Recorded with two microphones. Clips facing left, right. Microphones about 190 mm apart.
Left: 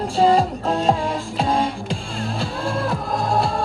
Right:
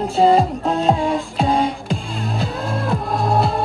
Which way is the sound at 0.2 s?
Centre (ahead or behind).